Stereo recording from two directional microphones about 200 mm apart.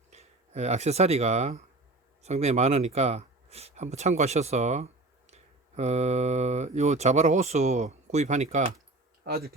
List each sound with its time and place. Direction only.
0.1 s speech: 35° right (ahead or behind)
9.2 s speech: 50° right (ahead or behind)